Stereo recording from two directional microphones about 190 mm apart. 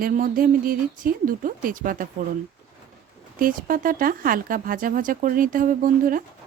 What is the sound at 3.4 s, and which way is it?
Speech, 45° right (ahead or behind).